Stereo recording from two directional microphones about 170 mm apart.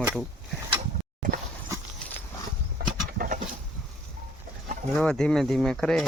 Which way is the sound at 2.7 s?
55° right (ahead or behind).